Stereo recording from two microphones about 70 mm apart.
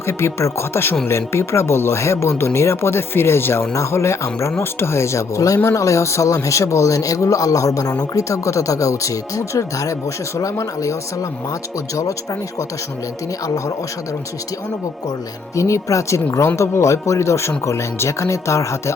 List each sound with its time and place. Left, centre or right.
0.1 s speech: left
15.5 s speech: left